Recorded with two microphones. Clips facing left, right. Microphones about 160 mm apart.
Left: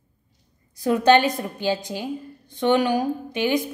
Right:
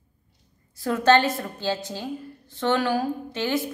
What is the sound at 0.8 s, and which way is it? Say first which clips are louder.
A woman's voice: left 2 dB; 15° left (ahead or behind).